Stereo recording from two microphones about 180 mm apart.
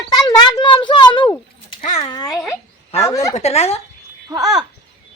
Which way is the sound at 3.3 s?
40° left (ahead or behind).